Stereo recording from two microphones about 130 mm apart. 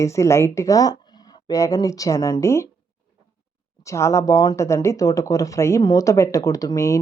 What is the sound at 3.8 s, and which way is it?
Speech, 20° left (ahead or behind).